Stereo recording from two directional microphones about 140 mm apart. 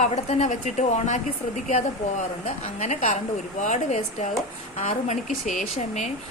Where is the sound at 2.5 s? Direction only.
55° left (ahead or behind).